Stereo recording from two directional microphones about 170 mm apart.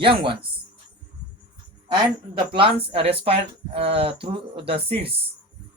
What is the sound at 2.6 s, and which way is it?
Speech, 30° right (ahead or behind).